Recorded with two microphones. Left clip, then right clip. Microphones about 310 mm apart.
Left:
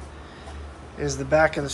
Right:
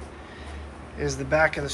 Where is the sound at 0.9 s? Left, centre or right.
Centre.